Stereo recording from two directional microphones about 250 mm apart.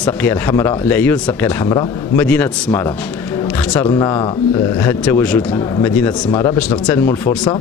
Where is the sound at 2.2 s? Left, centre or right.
Centre.